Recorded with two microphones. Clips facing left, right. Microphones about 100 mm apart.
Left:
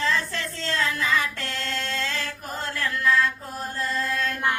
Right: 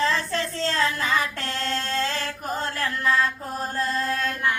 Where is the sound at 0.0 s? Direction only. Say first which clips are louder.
Right 2 dB; 35° right (ahead or behind).